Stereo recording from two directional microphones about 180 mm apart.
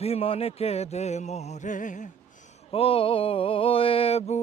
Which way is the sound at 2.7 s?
30° left (ahead or behind).